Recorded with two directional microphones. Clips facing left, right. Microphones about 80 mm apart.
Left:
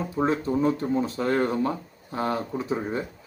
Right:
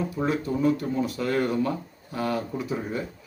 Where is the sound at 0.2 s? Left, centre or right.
Left.